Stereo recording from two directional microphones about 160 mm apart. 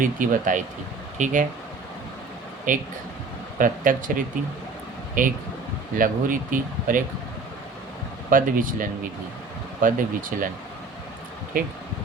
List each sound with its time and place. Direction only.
0.0 s speech: 55° right (ahead or behind)
2.7 s speech: 55° right (ahead or behind)
8.3 s speech: 60° right (ahead or behind)
11.5 s speech: 60° right (ahead or behind)